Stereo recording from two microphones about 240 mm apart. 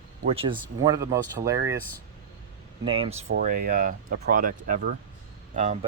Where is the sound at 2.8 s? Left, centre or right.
Right.